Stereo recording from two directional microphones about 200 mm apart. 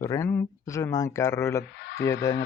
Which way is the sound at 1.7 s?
55° left (ahead or behind).